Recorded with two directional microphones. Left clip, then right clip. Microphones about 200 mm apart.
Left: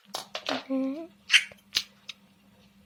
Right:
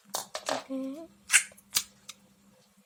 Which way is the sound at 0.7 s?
20° left (ahead or behind).